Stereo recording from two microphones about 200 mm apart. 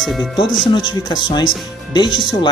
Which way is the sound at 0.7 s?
20° left (ahead or behind).